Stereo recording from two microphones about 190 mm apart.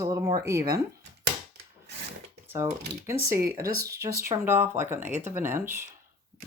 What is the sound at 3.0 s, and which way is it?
Speech, 15° right (ahead or behind).